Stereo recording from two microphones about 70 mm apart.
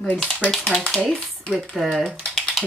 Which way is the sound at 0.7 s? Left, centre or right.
Centre.